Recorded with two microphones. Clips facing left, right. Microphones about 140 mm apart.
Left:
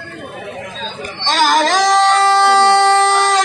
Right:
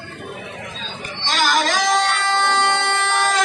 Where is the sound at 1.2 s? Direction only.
45° left (ahead or behind).